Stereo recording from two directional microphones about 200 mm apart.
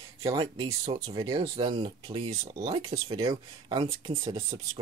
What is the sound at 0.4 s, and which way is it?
Speech, 20° right (ahead or behind).